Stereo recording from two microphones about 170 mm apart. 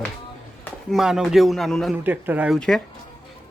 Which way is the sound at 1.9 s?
10° right (ahead or behind).